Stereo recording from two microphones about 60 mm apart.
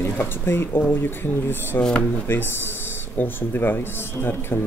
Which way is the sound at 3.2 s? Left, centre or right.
Left.